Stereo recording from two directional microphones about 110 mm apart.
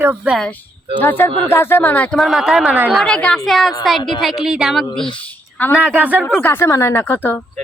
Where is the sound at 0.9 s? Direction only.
15° left (ahead or behind).